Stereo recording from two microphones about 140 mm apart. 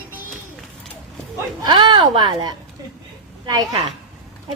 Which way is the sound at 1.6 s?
35° right (ahead or behind).